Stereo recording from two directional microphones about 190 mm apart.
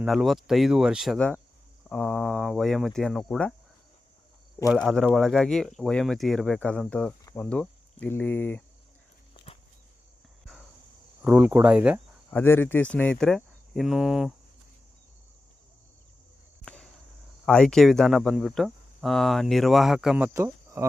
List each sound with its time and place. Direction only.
0.0 s speech: centre (ahead or behind)
4.8 s speech: centre (ahead or behind)
9.3 s a sound: 30° left (ahead or behind)
11.2 s speech: 5° right (ahead or behind)
12.3 s speech: 10° left (ahead or behind)
17.4 s speech: centre (ahead or behind); by 20.8 s 15° right (ahead or behind)